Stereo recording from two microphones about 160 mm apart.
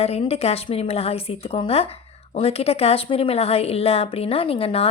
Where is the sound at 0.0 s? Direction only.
40° left (ahead or behind).